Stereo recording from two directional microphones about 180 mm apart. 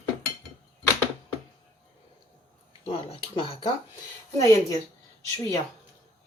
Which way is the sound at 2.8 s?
30° left (ahead or behind).